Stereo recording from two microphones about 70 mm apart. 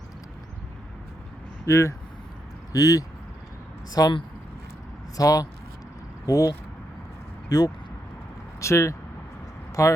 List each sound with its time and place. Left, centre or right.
1.6 s speech: left
2.7 s speech: left
5.1 s speech: left
7.5 s speech: left
8.6 s speech: left